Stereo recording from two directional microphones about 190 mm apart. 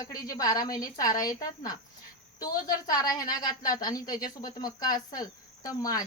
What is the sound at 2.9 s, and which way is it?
A woman's voice, 20° left (ahead or behind).